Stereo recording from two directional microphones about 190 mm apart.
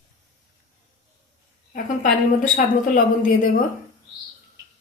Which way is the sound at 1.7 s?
40° left (ahead or behind).